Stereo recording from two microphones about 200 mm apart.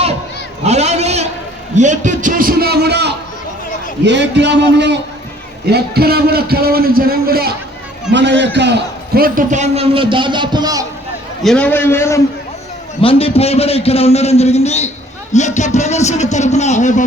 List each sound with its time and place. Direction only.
0.6 s a sound: 35° right (ahead or behind)
1.7 s a man's voice: 35° right (ahead or behind)
8.1 s a man's voice: 60° right (ahead or behind); by 10.8 s 20° right (ahead or behind)
11.4 s a man's voice: 5° left (ahead or behind)
13.0 s a man's voice: 30° left (ahead or behind)